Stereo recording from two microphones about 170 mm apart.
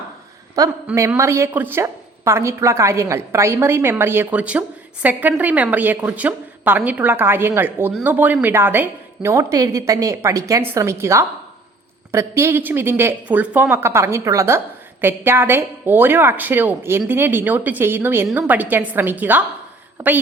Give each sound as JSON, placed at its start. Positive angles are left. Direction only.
{"t": 0.6, "sound": "a man's voice", "side_deg": -20}